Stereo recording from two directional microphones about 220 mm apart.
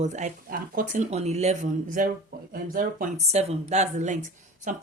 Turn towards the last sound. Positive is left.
turn(degrees=-35)  # may be behind; listen again after turning